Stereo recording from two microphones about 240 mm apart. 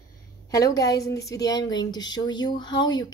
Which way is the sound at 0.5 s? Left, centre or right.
Centre.